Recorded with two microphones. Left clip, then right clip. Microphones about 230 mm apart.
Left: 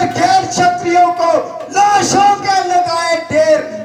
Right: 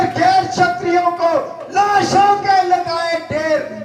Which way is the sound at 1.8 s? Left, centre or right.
Left.